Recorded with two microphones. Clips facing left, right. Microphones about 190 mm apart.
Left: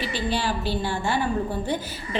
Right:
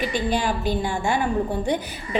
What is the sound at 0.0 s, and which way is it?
A woman's voice, 15° right (ahead or behind).